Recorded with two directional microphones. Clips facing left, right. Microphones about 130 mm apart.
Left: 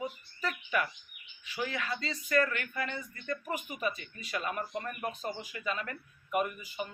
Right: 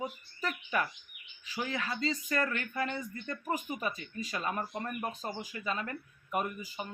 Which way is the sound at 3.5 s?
35° right (ahead or behind).